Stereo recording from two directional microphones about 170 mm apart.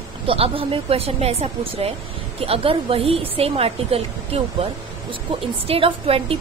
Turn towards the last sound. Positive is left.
turn(degrees=-35)  # may be behind; listen again after turning